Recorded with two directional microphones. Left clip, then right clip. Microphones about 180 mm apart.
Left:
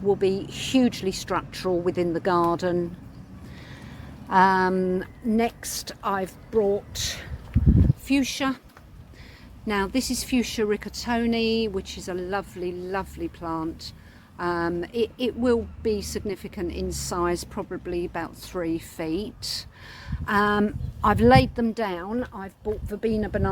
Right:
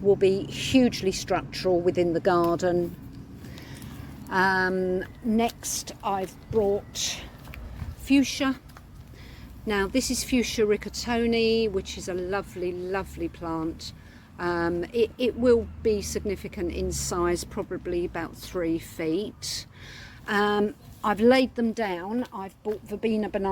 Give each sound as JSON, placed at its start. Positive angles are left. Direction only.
{"t": 0.1, "sound": "a woman's voice", "side_deg": 0}
{"t": 4.3, "sound": "a woman's voice", "side_deg": 20}
{"t": 7.5, "sound": "a sound", "side_deg": -65}
{"t": 8.0, "sound": "a woman's voice", "side_deg": 20}
{"t": 9.6, "sound": "a woman's voice", "side_deg": 10}
{"t": 20.1, "sound": "a sound", "side_deg": 5}
{"t": 20.7, "sound": "a woman's voice", "side_deg": 20}